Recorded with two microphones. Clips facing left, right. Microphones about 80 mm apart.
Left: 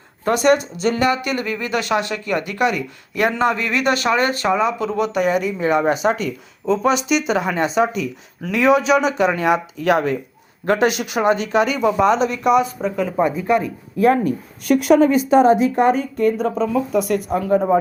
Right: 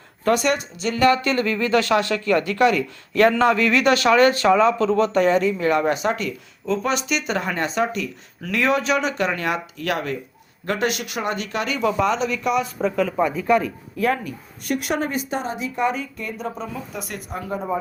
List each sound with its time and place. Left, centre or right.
0.3 s speech: left
1.0 s speech: centre
14.0 s speech: left
15.5 s a woman's voice: left
16.6 s speech: left
17.3 s speech: left